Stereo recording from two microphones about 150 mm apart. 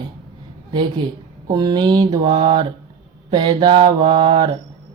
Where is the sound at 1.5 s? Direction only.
30° right (ahead or behind).